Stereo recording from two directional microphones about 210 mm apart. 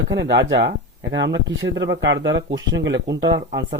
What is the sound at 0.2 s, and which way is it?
Speech, 55° right (ahead or behind).